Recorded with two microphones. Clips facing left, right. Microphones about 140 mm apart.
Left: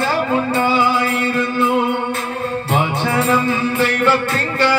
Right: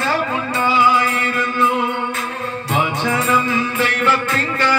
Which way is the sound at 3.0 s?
30° left (ahead or behind).